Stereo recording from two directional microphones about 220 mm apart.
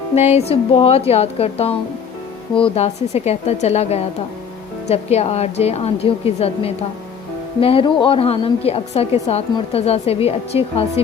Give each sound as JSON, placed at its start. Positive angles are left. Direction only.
{"t": 0.2, "sound": "a woman's voice", "side_deg": 30}